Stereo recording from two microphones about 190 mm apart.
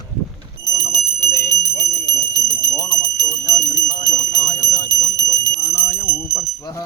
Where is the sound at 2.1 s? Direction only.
15° left (ahead or behind).